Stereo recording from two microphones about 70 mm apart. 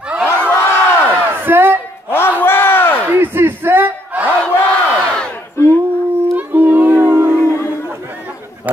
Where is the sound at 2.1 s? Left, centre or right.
Left.